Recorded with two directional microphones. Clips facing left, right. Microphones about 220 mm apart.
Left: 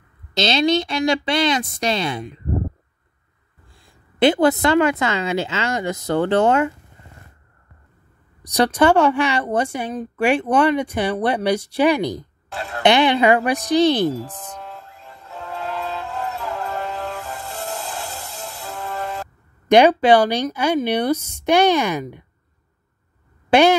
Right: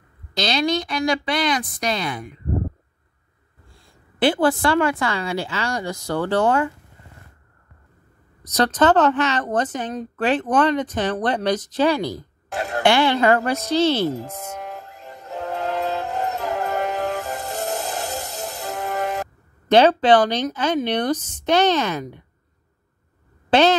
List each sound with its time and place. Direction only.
0.3 s a woman's voice: 25° left (ahead or behind)
3.7 s a woman's voice: 20° left (ahead or behind)
8.5 s a woman's voice: 10° left (ahead or behind)
12.5 s speech: 45° right (ahead or behind)
12.8 s a woman's voice: 20° left (ahead or behind)
14.7 s train: 40° right (ahead or behind)
19.7 s a woman's voice: 10° left (ahead or behind)
23.5 s a woman's voice: 10° left (ahead or behind)